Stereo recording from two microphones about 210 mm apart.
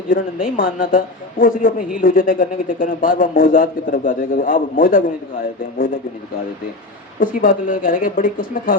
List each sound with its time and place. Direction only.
0.1 s a man's voice: 40° left (ahead or behind)
7.2 s a man's voice: 40° left (ahead or behind)